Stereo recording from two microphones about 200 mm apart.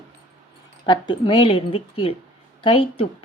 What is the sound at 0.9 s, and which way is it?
Speech, 25° left (ahead or behind).